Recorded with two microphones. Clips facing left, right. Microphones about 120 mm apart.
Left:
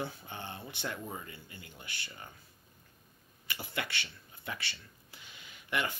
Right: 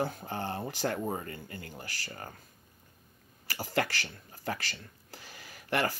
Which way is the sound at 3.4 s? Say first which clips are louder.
Right 8 dB; 40° right (ahead or behind).